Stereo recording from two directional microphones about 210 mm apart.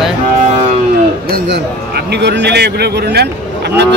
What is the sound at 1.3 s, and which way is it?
Speech, 50° right (ahead or behind).